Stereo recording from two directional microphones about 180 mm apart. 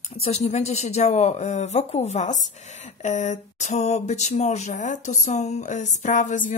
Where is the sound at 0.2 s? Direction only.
35° left (ahead or behind).